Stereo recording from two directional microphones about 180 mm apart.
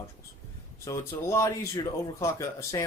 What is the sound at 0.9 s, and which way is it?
Speech, 15° left (ahead or behind).